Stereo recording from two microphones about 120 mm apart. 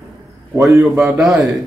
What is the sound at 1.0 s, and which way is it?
Speech, 5° right (ahead or behind).